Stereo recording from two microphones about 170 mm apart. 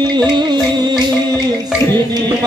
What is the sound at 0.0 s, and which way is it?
Music, 25° right (ahead or behind).